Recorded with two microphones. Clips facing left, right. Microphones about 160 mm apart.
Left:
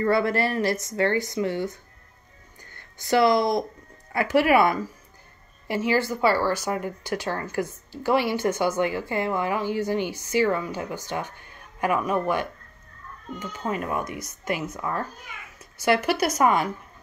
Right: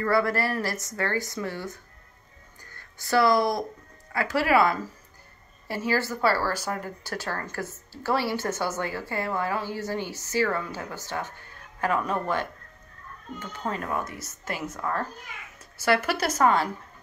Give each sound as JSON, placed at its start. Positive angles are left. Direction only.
{"t": 0.0, "sound": "speech", "side_deg": 25}
{"t": 5.9, "sound": "speech", "side_deg": 15}
{"t": 16.1, "sound": "speech", "side_deg": 10}